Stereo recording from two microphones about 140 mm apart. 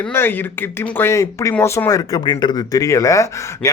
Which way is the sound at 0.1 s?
15° left (ahead or behind).